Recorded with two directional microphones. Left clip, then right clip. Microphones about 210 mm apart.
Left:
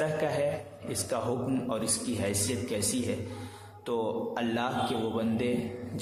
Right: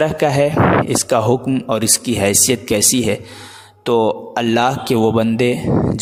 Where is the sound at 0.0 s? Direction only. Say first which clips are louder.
Right 14 dB; 50° right (ahead or behind).